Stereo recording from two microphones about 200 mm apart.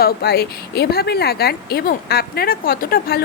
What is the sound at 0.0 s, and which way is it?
Speech, 55° left (ahead or behind).